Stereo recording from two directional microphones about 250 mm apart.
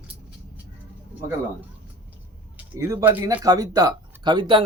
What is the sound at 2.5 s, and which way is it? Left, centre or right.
Speech, centre.